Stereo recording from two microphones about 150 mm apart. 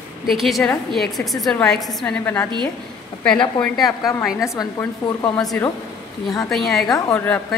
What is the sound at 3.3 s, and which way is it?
Speech, 30° left (ahead or behind).